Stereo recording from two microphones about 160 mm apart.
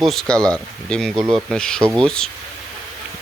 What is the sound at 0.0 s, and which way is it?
Speech, centre (ahead or behind).